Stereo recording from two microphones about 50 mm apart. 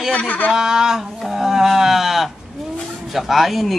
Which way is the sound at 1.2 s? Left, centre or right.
Centre.